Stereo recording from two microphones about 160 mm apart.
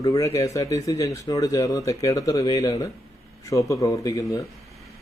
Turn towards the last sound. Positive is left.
turn(degrees=20)  # may be behind; listen again after turning